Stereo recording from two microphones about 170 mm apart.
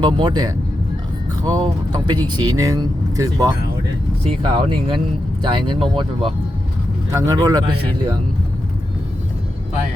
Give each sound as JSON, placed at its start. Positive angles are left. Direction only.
{"t": 0.0, "sound": "speech", "side_deg": -25}
{"t": 4.2, "sound": "speech", "side_deg": -30}
{"t": 7.1, "sound": "speech", "side_deg": -20}